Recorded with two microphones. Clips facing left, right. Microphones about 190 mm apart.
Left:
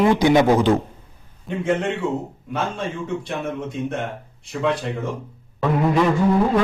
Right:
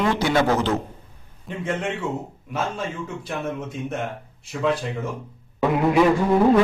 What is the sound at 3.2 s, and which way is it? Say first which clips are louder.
Speech: left 2 dB; centre (ahead or behind).